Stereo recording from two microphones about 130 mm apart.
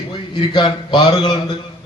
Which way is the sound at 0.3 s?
35° left (ahead or behind).